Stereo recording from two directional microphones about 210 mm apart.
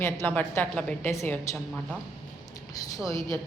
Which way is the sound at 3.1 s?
15° left (ahead or behind).